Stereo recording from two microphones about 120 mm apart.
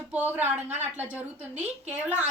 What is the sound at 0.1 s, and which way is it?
A woman's voice, 15° right (ahead or behind).